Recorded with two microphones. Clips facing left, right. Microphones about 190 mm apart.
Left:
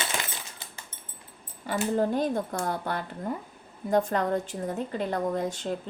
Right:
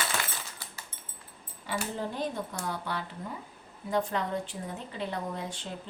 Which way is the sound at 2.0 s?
45° left (ahead or behind).